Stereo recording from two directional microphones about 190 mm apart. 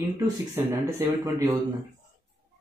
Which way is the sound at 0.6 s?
15° right (ahead or behind).